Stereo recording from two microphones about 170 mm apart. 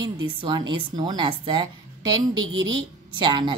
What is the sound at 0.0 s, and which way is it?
A woman's voice, 25° right (ahead or behind).